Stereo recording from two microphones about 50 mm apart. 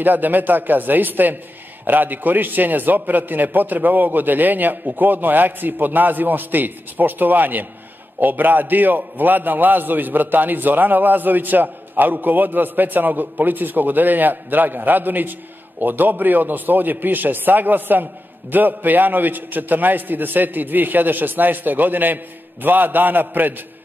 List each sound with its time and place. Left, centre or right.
0.0 s a man's voice: right